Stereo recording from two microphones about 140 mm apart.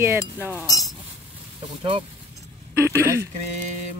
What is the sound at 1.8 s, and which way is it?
Speech, 35° right (ahead or behind).